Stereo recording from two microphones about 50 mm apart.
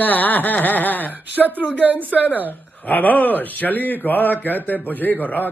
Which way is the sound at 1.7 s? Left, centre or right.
Right.